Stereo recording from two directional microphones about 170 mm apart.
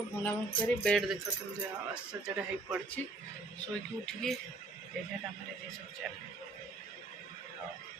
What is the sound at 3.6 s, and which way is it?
Speech, 5° left (ahead or behind).